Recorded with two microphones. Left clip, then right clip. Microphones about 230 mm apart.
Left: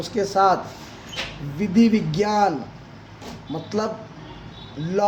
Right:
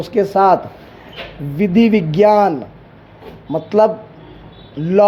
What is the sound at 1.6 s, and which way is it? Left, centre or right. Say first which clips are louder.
Speech: right 6 dB; right.